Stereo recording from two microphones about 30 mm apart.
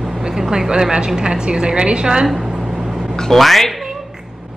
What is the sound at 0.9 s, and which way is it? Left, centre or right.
A woman's voice, right.